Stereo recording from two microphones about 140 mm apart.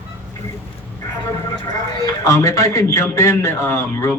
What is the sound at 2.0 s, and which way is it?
A man's voice, 20° left (ahead or behind).